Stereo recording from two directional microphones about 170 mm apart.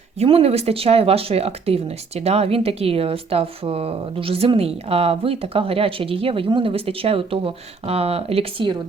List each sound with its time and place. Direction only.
0.2 s speech: 35° right (ahead or behind)